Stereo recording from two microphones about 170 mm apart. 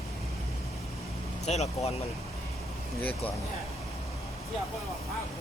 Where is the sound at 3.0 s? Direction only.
10° left (ahead or behind).